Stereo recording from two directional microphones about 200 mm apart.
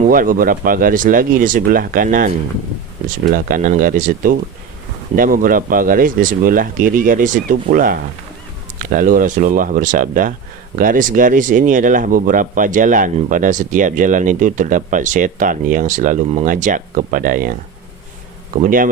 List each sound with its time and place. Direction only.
0.1 s speech: 45° right (ahead or behind)